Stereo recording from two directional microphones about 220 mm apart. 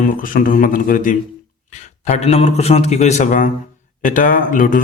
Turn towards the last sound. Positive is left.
turn(degrees=35)  # may be behind; listen again after turning